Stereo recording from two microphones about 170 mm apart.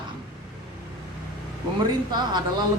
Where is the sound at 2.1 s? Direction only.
25° right (ahead or behind).